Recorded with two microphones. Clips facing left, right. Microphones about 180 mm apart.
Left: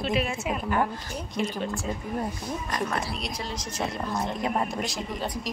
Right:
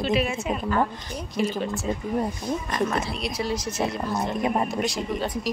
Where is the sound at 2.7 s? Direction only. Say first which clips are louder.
Right 3 dB; 25° right (ahead or behind).